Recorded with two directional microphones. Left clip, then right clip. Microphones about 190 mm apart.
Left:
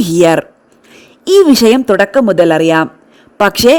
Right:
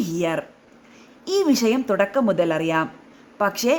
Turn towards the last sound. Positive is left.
turn(degrees=50)  # may be behind; listen again after turning